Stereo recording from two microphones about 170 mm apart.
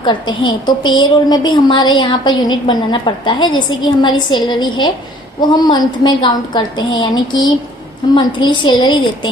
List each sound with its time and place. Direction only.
0.0 s a woman's voice: 25° left (ahead or behind)